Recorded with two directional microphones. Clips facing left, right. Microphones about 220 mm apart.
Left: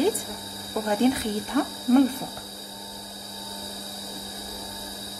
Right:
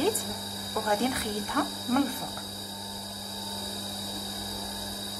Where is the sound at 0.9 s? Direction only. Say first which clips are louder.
Left 7 dB; 25° left (ahead or behind).